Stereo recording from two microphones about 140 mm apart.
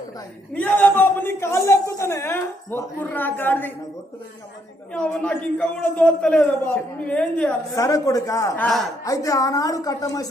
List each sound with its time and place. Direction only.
0.5 s a man's voice: 10° left (ahead or behind)
4.9 s a man's voice: 5° left (ahead or behind)
7.8 s a woman's voice: 25° left (ahead or behind)
8.5 s speech: 5° left (ahead or behind)
9.0 s a woman's voice: 25° left (ahead or behind)